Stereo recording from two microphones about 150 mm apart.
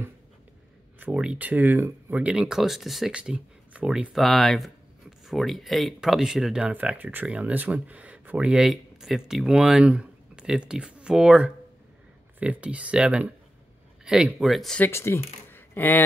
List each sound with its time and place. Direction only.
0.9 s speech: 10° right (ahead or behind)
14.9 s speech: 15° left (ahead or behind)